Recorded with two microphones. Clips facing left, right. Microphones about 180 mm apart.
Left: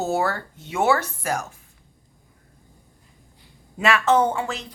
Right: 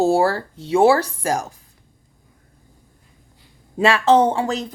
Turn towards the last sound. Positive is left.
turn(degrees=-35)  # may be behind; listen again after turning